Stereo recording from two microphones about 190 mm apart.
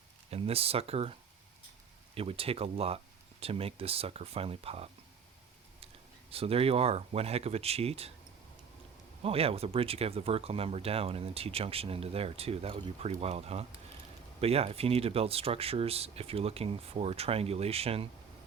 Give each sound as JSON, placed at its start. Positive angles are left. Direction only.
{"t": 0.3, "sound": "speech", "side_deg": -30}
{"t": 2.1, "sound": "speech", "side_deg": -30}
{"t": 6.3, "sound": "speech", "side_deg": -30}
{"t": 9.2, "sound": "speech", "side_deg": -30}